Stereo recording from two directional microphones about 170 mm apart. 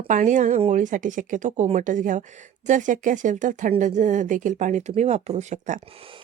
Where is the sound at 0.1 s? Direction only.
50° right (ahead or behind).